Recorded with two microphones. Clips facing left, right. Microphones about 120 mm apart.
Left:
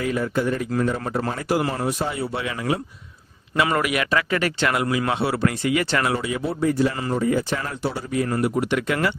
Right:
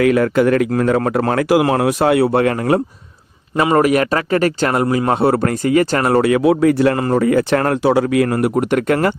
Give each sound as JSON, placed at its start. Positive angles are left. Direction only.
{"t": 0.0, "sound": "speech", "side_deg": -80}
{"t": 3.6, "sound": "speech", "side_deg": -40}
{"t": 6.1, "sound": "speech", "side_deg": -70}